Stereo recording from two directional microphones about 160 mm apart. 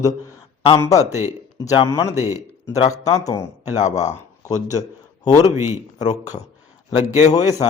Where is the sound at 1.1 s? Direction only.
15° right (ahead or behind).